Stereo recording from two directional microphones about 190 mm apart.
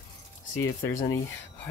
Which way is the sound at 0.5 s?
15° left (ahead or behind).